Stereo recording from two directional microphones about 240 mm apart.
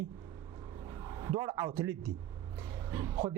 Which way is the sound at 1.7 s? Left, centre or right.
Centre.